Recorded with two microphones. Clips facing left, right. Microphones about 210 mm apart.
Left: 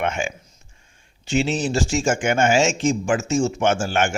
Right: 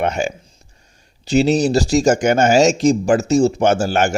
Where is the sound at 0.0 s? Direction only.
35° right (ahead or behind).